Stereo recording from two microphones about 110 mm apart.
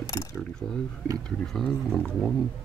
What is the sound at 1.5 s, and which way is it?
Speech, 5° left (ahead or behind).